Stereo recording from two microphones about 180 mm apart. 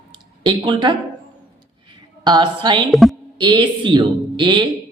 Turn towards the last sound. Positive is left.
turn(degrees=-25)  # may be behind; listen again after turning